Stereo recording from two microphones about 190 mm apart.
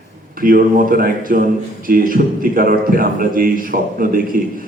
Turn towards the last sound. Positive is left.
turn(degrees=-45)  # may be behind; listen again after turning